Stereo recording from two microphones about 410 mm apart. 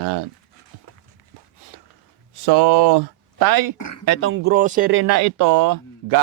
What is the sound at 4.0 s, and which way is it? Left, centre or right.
Speech, right.